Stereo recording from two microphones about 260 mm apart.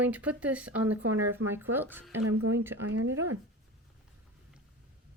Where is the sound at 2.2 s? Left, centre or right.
Right.